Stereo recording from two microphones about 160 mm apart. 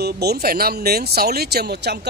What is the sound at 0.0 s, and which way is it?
Speech, 90° right.